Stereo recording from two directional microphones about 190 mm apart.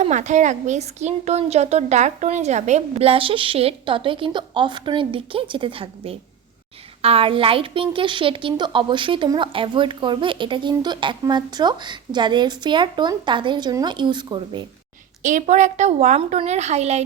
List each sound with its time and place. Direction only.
0.0 s a woman's voice: 40° right (ahead or behind)
15.2 s speech: 40° right (ahead or behind)